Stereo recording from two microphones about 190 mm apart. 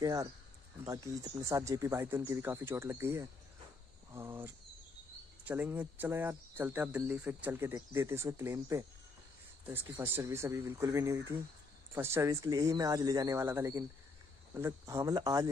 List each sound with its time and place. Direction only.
0.0 s speech: 20° right (ahead or behind)
5.5 s speech: 10° right (ahead or behind)